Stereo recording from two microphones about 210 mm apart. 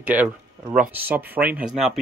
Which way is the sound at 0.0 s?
10° right (ahead or behind).